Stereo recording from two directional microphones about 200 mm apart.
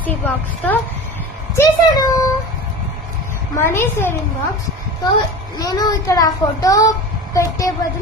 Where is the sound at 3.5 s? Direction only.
10° left (ahead or behind).